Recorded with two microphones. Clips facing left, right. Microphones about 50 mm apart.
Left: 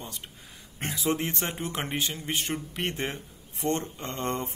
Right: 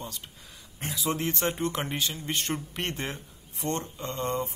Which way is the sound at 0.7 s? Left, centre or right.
Left.